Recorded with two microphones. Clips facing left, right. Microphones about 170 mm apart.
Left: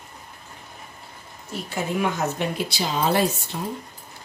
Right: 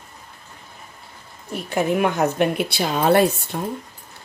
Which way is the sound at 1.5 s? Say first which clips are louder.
Right 6 dB; 60° right (ahead or behind).